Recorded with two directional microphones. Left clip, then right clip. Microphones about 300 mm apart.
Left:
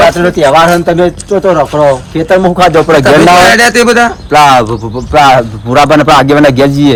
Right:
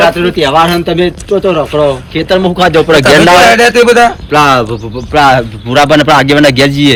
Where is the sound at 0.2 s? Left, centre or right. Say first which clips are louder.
Left 3 dB; left.